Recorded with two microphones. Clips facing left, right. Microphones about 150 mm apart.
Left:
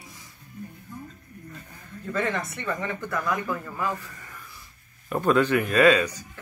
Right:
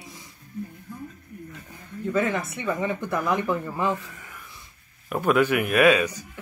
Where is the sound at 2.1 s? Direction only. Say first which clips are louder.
Right 3 dB; 5° right (ahead or behind); by 4.0 s 25° right (ahead or behind).